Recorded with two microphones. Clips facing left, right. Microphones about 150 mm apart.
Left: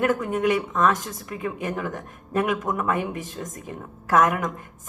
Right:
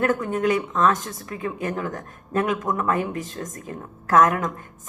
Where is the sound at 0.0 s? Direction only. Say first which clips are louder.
Even; 15° left (ahead or behind).